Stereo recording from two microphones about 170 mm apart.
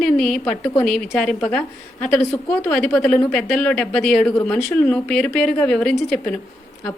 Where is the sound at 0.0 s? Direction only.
5° left (ahead or behind).